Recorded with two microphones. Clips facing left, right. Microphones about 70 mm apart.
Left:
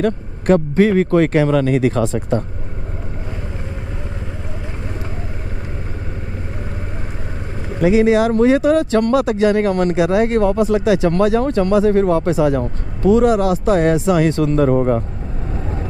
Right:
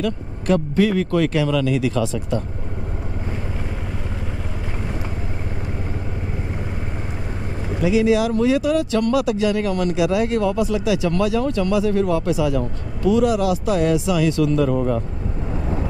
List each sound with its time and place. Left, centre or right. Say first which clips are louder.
0.0 s speech: left 5 dB; left
7.8 s speech: left 4 dB; left